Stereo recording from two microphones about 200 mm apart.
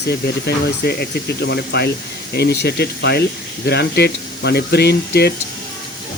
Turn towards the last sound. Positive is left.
turn(degrees=55)  # may be behind; listen again after turning